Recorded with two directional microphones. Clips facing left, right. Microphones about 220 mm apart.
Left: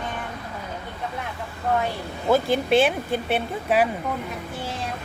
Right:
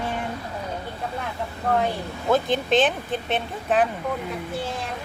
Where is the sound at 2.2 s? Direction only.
10° left (ahead or behind).